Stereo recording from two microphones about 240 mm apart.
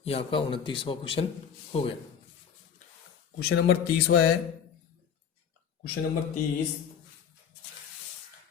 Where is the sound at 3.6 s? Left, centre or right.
Left.